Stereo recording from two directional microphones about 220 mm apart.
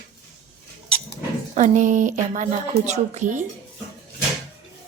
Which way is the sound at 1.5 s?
35° right (ahead or behind).